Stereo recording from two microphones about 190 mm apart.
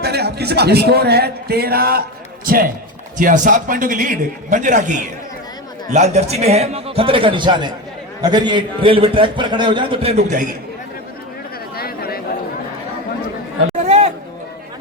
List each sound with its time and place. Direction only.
0.0 s a man's voice: 60° right (ahead or behind); by 10.3 s 35° right (ahead or behind)
11.8 s chatter: 55° left (ahead or behind)
13.8 s a sound: 35° right (ahead or behind)